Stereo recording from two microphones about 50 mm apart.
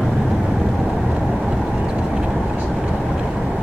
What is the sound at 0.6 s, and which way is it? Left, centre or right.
Vehicle, centre.